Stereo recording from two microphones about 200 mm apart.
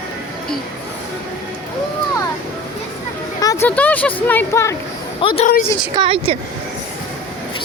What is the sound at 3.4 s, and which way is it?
Speech, 15° left (ahead or behind).